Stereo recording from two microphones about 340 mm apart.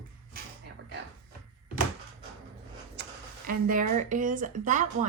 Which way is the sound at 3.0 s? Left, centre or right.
Right.